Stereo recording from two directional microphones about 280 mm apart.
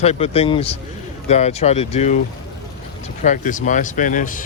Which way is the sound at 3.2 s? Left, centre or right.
Left.